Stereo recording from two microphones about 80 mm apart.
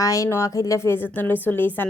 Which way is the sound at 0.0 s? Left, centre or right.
Left.